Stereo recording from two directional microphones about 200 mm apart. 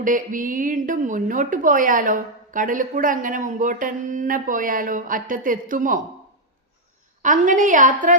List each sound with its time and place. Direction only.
0.0 s a woman's voice: 40° right (ahead or behind)
7.2 s a woman's voice: 40° right (ahead or behind)